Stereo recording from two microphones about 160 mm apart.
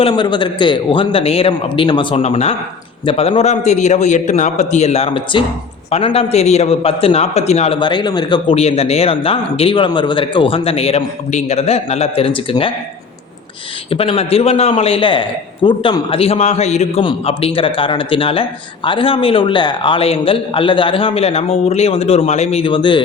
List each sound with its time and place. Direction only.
0.0 s a man's voice: 30° left (ahead or behind)
7.8 s a man's voice: 30° left (ahead or behind)
13.9 s a man's voice: 35° left (ahead or behind)